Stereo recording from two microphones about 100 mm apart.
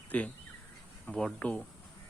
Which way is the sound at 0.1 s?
15° left (ahead or behind).